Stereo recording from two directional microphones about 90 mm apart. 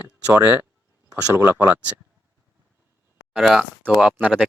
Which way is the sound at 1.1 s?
35° right (ahead or behind).